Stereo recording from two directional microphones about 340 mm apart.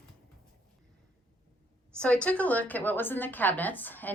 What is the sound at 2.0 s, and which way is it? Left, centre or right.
A woman's voice, centre.